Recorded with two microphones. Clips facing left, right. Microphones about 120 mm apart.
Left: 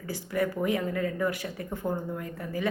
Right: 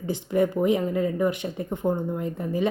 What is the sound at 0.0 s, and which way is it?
A woman's voice, 20° right (ahead or behind).